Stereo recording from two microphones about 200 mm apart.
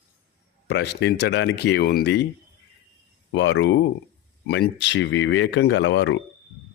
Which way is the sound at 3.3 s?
65° left (ahead or behind).